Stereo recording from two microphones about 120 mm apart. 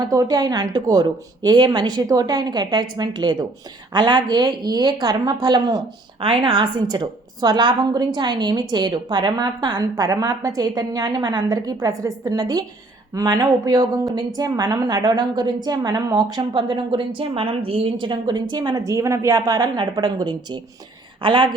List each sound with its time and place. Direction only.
0.1 s a woman's voice: 30° right (ahead or behind)